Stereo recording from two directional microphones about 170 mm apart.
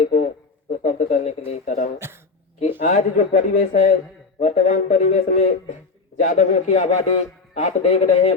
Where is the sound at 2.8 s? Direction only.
45° left (ahead or behind).